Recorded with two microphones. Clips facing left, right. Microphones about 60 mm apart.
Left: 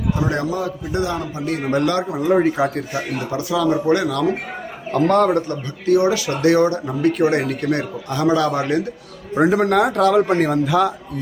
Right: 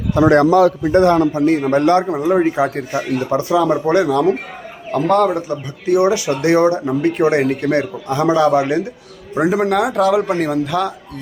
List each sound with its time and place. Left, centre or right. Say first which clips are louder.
0.2 s a man's voice: right 16 dB; right
0.8 s a man's voice: right 10 dB; right
1.7 s speech: right 3 dB; right
2.2 s speech: left 3 dB; centre
2.6 s speech: right 3 dB; right
4.9 s speech: right 1 dB; centre
6.0 s speech: right 2 dB; right
9.3 s a man's voice: even; centre